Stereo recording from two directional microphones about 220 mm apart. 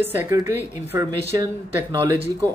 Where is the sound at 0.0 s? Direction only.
10° right (ahead or behind).